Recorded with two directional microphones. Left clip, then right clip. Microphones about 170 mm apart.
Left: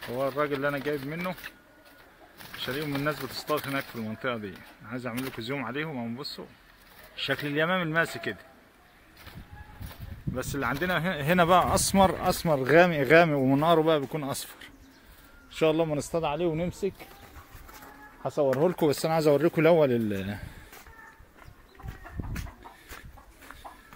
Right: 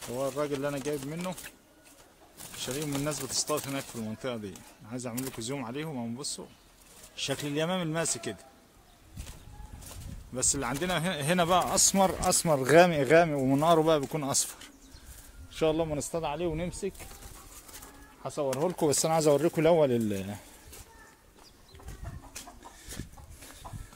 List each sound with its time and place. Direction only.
0.1 s speech: 5° right (ahead or behind)
2.6 s speech: 15° right (ahead or behind)
7.2 s speech: 20° right (ahead or behind)
10.3 s speech: 10° right (ahead or behind)
11.3 s speech: 5° left (ahead or behind)
12.4 s speech: 5° right (ahead or behind)
13.2 s speech: 10° left (ahead or behind); by 14.7 s 15° right (ahead or behind)
15.5 s speech: 10° left (ahead or behind)
18.2 s speech: 25° left (ahead or behind)
18.8 s speech: centre (ahead or behind)